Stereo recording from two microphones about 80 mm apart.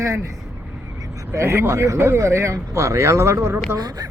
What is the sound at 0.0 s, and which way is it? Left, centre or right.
Speech, right.